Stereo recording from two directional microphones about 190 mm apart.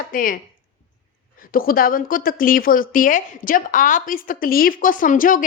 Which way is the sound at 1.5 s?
50° left (ahead or behind).